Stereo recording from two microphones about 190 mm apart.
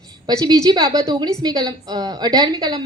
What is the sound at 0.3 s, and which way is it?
A woman's voice, 20° right (ahead or behind).